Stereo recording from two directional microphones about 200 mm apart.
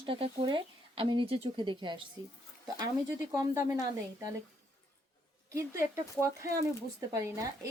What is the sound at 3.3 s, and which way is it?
Speech, 15° right (ahead or behind).